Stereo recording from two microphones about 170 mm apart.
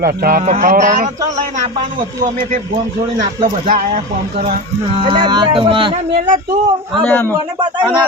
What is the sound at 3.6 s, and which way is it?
Speech, 50° right (ahead or behind).